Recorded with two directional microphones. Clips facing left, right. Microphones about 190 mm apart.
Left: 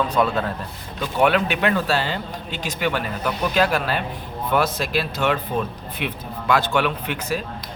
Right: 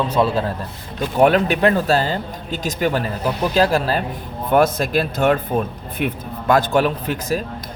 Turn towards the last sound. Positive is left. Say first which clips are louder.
# right 4 dB
turn(degrees=-40)  # may be behind; listen again after turning